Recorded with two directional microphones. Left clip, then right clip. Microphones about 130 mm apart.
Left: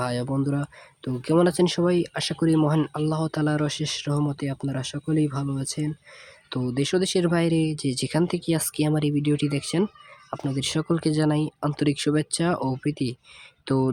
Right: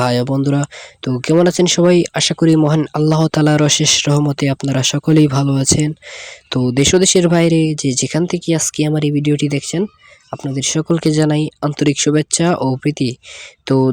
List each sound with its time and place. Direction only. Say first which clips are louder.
0.0 s speech: right 11 dB; 65° right (ahead or behind)
6.5 s speech: right 11 dB; 55° right (ahead or behind)